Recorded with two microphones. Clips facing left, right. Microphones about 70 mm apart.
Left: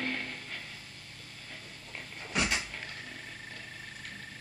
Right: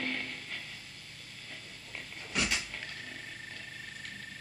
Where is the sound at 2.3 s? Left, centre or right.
Left.